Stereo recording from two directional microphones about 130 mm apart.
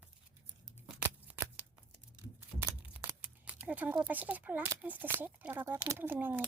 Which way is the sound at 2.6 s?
15° right (ahead or behind).